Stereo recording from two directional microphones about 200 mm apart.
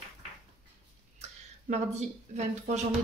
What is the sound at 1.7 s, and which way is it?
Speech, 35° right (ahead or behind).